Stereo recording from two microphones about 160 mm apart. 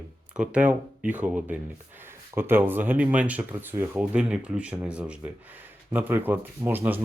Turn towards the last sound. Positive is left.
turn(degrees=-10)  # may be behind; listen again after turning